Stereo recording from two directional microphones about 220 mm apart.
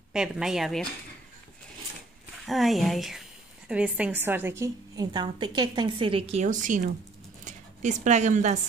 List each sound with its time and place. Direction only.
0.1 s a woman's voice: 5° right (ahead or behind)
2.4 s a woman's voice: centre (ahead or behind); by 8.5 s 35° right (ahead or behind)